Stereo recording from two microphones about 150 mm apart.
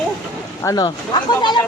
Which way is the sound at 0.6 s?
25° left (ahead or behind).